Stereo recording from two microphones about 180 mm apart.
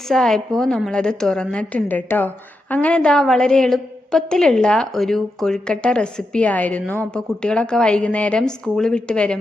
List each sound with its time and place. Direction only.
0.1 s a woman's voice: centre (ahead or behind)